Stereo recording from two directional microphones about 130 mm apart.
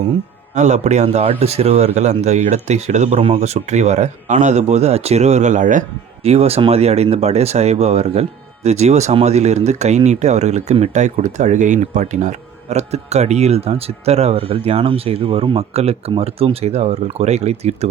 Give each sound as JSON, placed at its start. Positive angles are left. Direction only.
{"t": 0.5, "sound": "speech", "side_deg": -65}
{"t": 6.2, "sound": "speech", "side_deg": -50}